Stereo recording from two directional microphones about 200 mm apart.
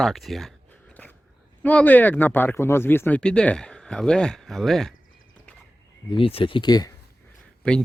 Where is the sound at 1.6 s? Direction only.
10° left (ahead or behind).